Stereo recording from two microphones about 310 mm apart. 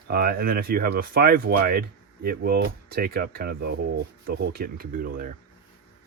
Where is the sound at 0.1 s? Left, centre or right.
Right.